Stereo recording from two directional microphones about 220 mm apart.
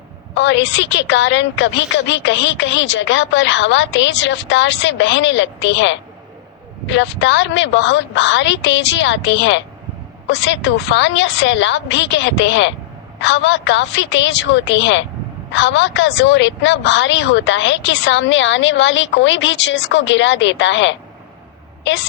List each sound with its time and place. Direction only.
0.3 s a woman's voice: 55° left (ahead or behind)